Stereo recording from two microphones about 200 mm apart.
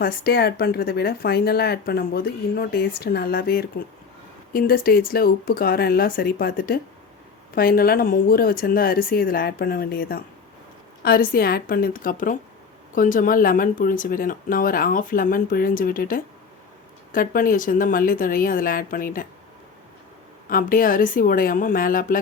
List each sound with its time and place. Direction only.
0.0 s speech: 50° left (ahead or behind)
20.5 s speech: 45° left (ahead or behind)